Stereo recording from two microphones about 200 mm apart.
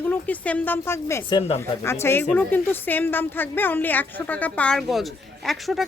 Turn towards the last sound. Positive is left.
turn(degrees=0)  # may be behind; listen again after turning